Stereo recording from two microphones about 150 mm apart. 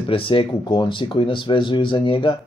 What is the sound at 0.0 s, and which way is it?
Speech, 35° left (ahead or behind).